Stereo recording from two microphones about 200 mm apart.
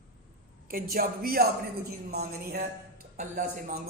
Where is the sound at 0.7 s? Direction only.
50° right (ahead or behind).